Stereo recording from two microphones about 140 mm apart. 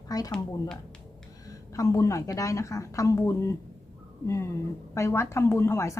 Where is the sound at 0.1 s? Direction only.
25° left (ahead or behind).